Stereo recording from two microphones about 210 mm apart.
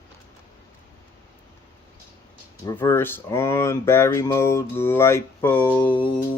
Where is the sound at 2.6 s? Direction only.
15° left (ahead or behind).